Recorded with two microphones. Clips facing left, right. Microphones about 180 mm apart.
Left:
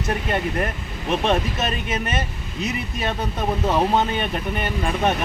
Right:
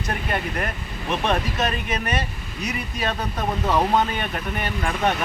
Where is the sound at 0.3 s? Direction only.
20° left (ahead or behind).